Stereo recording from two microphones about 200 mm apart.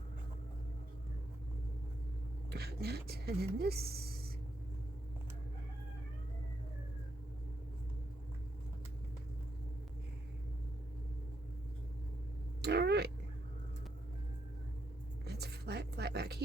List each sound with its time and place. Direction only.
2.5 s speech: 55° right (ahead or behind)
12.6 s cat: 55° right (ahead or behind)
15.2 s a sound: 55° right (ahead or behind)